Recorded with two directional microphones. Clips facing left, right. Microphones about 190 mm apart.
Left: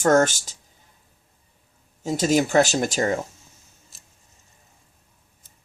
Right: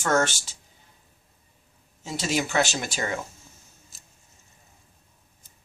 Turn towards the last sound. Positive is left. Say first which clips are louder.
# even
turn(degrees=0)  # may be behind; listen again after turning